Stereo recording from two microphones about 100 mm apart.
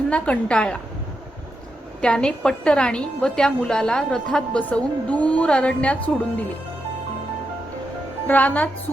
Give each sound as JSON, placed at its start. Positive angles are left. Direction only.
{"t": 0.1, "sound": "a woman's voice", "side_deg": 10}
{"t": 2.0, "sound": "a woman's voice", "side_deg": 10}
{"t": 8.3, "sound": "a woman's voice", "side_deg": 15}